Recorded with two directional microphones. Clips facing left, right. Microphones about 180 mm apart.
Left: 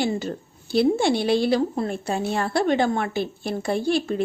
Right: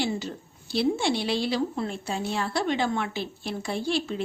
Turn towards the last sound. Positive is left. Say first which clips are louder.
# left 5 dB
turn(degrees=50)  # may be behind; listen again after turning